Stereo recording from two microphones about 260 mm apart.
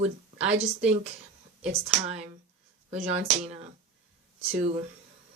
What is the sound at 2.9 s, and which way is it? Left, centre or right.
Speech, right.